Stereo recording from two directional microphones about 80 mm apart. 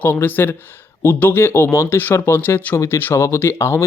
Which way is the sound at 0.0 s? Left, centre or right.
Left.